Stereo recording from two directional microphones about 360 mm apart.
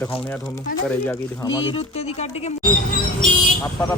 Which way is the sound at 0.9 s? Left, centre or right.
Centre.